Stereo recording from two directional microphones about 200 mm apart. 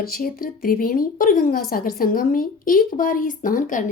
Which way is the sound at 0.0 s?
45° left (ahead or behind).